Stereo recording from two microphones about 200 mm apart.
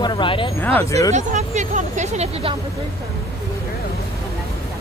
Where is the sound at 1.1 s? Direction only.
35° right (ahead or behind).